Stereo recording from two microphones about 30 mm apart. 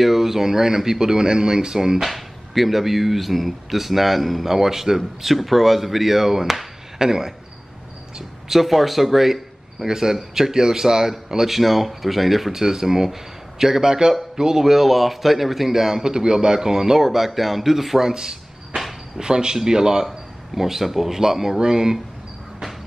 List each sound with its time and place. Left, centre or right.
0.0 s speech: centre
2.0 s speech: centre
8.5 s speech: centre
12.5 s speech: centre
16.0 s speech: right; by 18.0 s centre
18.0 s a sound: right
19.1 s speech: right
20.1 s speech: centre; by 21.9 s right